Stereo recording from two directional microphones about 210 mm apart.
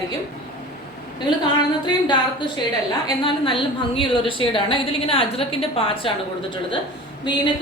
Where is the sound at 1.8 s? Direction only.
20° left (ahead or behind).